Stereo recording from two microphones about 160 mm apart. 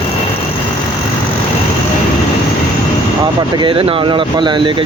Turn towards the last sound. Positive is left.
turn(degrees=-30)  # may be behind; listen again after turning